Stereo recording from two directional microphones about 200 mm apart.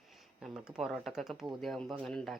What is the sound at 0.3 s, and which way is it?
Speech, 5° right (ahead or behind).